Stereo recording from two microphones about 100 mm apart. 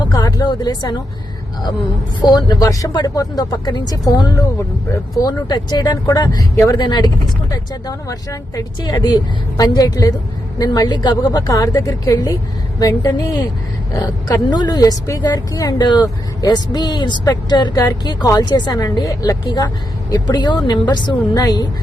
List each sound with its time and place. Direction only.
0.0 s speech: 40° left (ahead or behind)
2.2 s speech: 45° left (ahead or behind)
7.5 s speech: 35° left (ahead or behind)
14.5 s speech: 40° left (ahead or behind)